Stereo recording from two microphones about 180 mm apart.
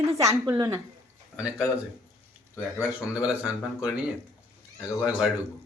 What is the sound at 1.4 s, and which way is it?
Speech, 5° right (ahead or behind).